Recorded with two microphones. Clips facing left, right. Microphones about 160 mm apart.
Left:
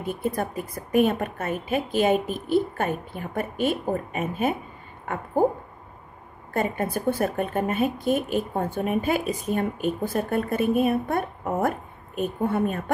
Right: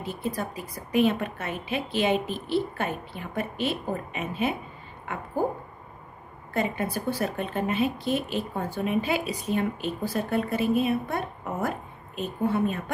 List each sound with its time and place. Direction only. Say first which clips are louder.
0.0 s a woman's voice: left 4 dB; 55° left (ahead or behind)
6.5 s speech: left 2 dB; 50° left (ahead or behind)